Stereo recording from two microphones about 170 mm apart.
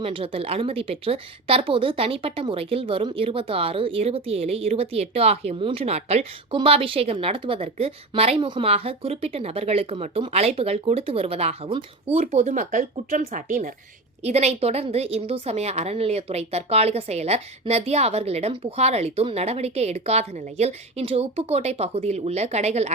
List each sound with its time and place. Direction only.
0.0 s a woman's voice: 30° right (ahead or behind); by 13.7 s 50° right (ahead or behind)
14.3 s a woman's voice: 40° right (ahead or behind)